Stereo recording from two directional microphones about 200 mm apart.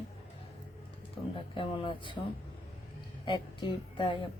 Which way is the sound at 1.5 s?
25° left (ahead or behind).